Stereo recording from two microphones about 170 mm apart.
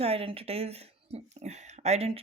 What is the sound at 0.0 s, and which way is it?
Speech, 35° right (ahead or behind).